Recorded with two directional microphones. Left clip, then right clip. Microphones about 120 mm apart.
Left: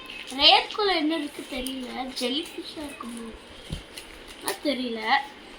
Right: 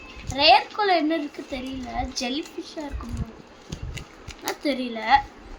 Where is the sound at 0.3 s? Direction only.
40° right (ahead or behind).